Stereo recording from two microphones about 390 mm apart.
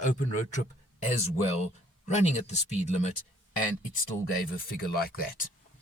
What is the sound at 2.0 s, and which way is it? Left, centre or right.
Speech, centre.